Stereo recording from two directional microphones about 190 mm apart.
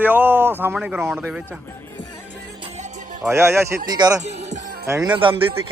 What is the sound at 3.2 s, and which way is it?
A man's voice, 15° right (ahead or behind).